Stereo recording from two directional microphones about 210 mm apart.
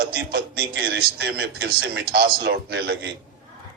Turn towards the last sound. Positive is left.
turn(degrees=-55)  # may be behind; listen again after turning